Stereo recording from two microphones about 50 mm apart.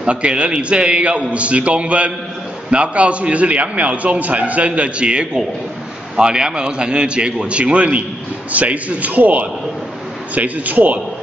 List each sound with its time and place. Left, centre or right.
0.0 s a man's voice: right